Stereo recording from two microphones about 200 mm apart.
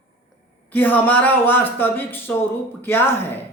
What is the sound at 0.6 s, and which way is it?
Speech, 10° left (ahead or behind).